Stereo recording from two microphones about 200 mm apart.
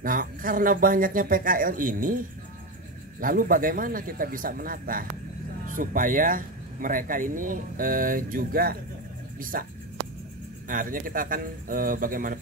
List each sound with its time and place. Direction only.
0.0 s speech: 45° right (ahead or behind)
10.7 s speech: 45° right (ahead or behind)